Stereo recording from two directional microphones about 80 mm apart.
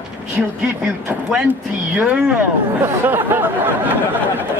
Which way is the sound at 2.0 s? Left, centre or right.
Centre.